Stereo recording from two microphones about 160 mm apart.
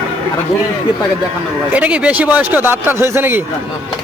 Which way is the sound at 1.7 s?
10° right (ahead or behind).